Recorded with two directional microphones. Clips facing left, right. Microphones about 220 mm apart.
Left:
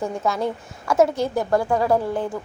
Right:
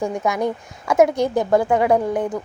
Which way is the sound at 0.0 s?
15° right (ahead or behind).